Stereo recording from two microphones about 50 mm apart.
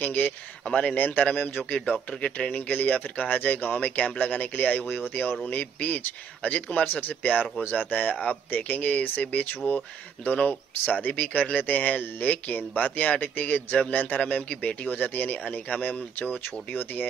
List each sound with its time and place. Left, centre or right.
0.0 s speech: left
1.7 s speech: left